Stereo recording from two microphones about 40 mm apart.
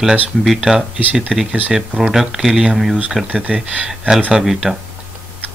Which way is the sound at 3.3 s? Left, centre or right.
Right.